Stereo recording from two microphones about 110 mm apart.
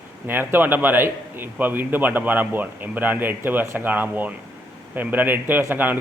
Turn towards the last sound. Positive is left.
turn(degrees=-15)  # may be behind; listen again after turning